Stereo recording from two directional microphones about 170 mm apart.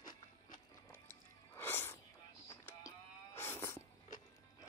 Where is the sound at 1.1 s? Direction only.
15° left (ahead or behind).